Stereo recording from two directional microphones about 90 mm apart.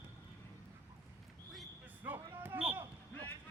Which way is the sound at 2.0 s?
25° right (ahead or behind).